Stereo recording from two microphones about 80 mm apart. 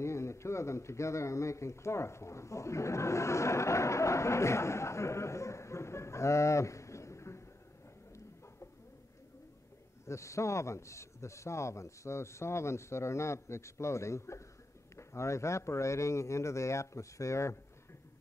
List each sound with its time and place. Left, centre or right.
0.0 s a man's voice: left
10.0 s a man's voice: left